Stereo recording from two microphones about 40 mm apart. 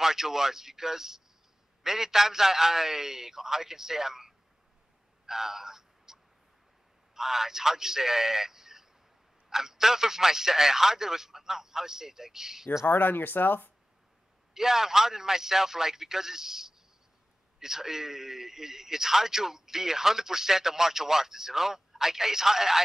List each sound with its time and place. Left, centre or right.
0.0 s a man's voice: centre
5.2 s a sound: centre
7.2 s a man's voice: centre
12.8 s speech: left
14.5 s a man's voice: centre